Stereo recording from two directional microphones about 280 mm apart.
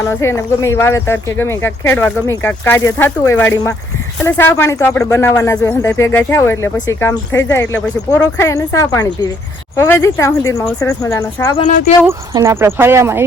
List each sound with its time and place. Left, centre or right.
0.0 s speech: centre
11.6 s speech: left
12.0 s speech: centre